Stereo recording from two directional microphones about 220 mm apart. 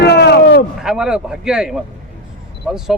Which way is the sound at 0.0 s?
50° left (ahead or behind).